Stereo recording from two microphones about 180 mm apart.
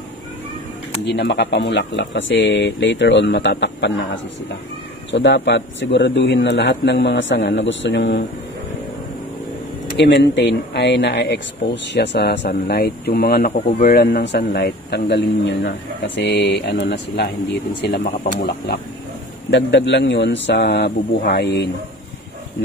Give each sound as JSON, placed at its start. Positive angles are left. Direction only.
{"t": 1.0, "sound": "a man's voice", "side_deg": 70}
{"t": 5.1, "sound": "a man's voice", "side_deg": 75}
{"t": 9.9, "sound": "speech", "side_deg": 75}
{"t": 16.2, "sound": "speech", "side_deg": 85}
{"t": 19.5, "sound": "speech", "side_deg": 80}